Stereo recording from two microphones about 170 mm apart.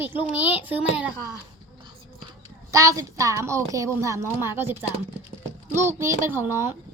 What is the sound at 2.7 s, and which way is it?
A woman's voice, 20° right (ahead or behind).